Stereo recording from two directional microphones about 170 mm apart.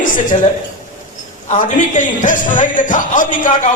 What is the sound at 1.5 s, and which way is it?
A man's voice, 50° left (ahead or behind).